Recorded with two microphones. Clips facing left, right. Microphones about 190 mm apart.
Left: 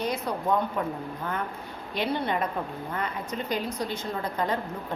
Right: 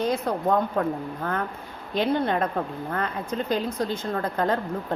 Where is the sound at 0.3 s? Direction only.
50° right (ahead or behind).